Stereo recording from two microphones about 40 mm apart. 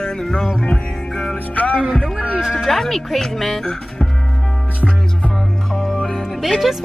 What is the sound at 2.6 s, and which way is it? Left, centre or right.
Speech, centre.